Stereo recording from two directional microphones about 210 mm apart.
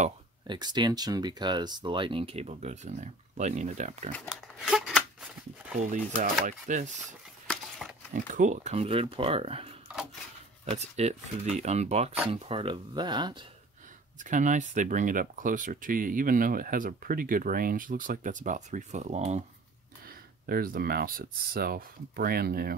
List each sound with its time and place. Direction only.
0.5 s speech: 20° right (ahead or behind); by 4.1 s 35° right (ahead or behind)
4.3 s a sound: centre (ahead or behind)
5.9 s speech: 35° right (ahead or behind)
7.8 s a sound: centre (ahead or behind)
8.3 s speech: 35° right (ahead or behind)
14.2 s speech: 35° right (ahead or behind)
20.4 s speech: 45° right (ahead or behind)